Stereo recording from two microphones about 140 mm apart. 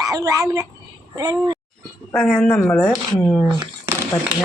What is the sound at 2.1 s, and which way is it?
Speech, 5° left (ahead or behind).